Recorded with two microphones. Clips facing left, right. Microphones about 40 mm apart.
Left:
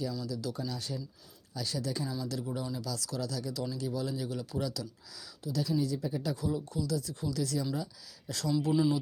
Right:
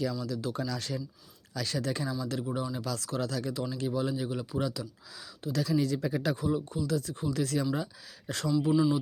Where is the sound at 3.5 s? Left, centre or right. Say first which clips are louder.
Right 3 dB; right.